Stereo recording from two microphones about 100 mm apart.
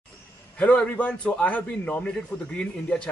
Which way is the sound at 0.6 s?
15° left (ahead or behind).